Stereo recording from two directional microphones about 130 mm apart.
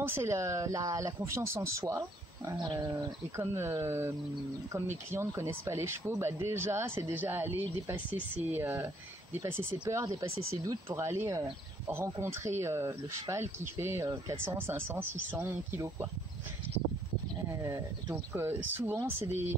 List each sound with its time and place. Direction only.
0.0 s speech: 20° right (ahead or behind)
3.3 s speech: 20° right (ahead or behind)
14.0 s speech: 30° right (ahead or behind)
14.4 s speech: 20° right (ahead or behind)
17.5 s speech: 25° right (ahead or behind)